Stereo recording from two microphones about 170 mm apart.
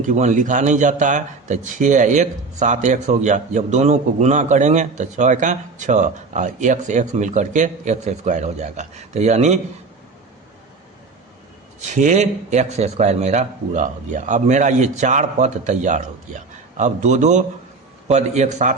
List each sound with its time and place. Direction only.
0.0 s speech: 45° right (ahead or behind)
11.9 s speech: 45° right (ahead or behind)